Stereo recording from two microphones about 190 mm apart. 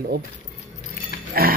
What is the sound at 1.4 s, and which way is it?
Pig, 50° right (ahead or behind).